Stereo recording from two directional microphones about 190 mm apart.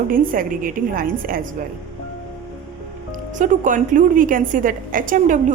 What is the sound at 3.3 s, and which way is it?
A woman's voice, 40° right (ahead or behind).